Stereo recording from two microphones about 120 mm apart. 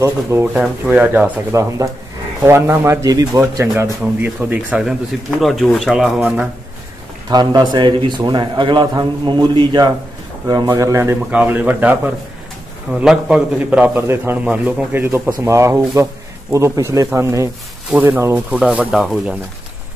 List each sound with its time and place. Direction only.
0.0 s a man's voice: 20° right (ahead or behind)
1.5 s speech: 25° right (ahead or behind)
4.0 s a man's voice: 15° right (ahead or behind)
5.4 s speech: centre (ahead or behind)
7.2 s a man's voice: 35° right (ahead or behind); by 12.0 s 15° right (ahead or behind)
13.0 s a man's voice: 5° right (ahead or behind)